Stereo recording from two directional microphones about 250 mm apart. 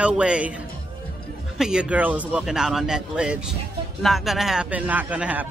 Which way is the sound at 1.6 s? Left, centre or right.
Centre.